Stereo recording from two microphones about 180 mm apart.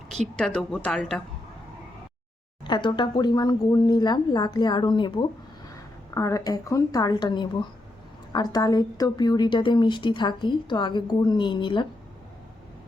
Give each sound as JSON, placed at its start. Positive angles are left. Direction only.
{"t": 0.3, "sound": "speech", "side_deg": 5}
{"t": 2.6, "sound": "speech", "side_deg": 25}